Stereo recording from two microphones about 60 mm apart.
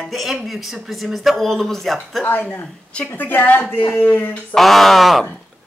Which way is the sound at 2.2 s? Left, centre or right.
Left.